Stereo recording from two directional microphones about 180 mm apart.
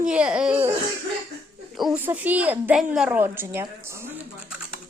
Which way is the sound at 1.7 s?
Centre (ahead or behind).